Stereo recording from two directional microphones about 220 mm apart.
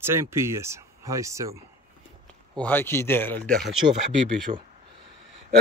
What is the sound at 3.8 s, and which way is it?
Speech, 30° right (ahead or behind).